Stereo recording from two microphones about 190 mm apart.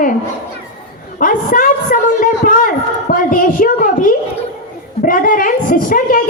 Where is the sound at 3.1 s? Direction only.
45° left (ahead or behind).